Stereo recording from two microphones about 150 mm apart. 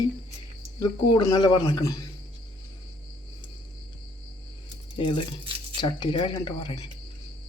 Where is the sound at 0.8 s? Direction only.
25° left (ahead or behind).